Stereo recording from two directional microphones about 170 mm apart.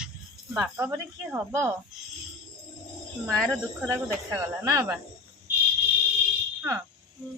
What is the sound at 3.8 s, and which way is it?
Speech, 15° right (ahead or behind).